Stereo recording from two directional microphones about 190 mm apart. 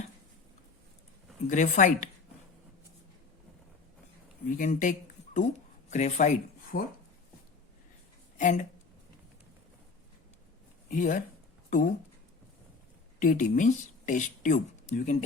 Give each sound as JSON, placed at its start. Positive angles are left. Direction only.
{"t": 1.5, "sound": "speech", "side_deg": 45}
{"t": 4.4, "sound": "speech", "side_deg": 45}
{"t": 8.4, "sound": "speech", "side_deg": 40}
{"t": 10.8, "sound": "speech", "side_deg": 40}
{"t": 13.1, "sound": "speech", "side_deg": 40}